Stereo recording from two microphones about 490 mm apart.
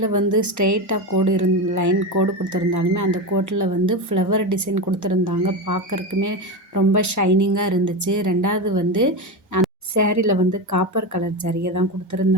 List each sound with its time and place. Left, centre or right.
0.0 s speech: right